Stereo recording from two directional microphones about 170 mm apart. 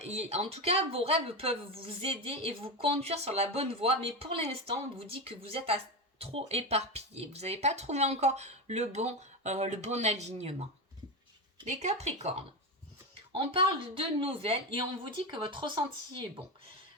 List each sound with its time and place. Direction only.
0.0 s speech: 40° right (ahead or behind)
11.7 s speech: 40° right (ahead or behind)